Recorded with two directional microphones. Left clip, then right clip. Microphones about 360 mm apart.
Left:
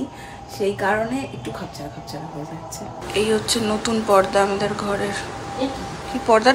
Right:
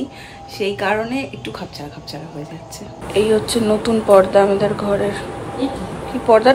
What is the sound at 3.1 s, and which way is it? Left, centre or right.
Speech, centre.